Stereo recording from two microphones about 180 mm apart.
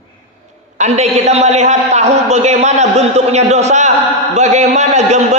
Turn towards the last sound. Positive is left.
turn(degrees=-40)  # may be behind; listen again after turning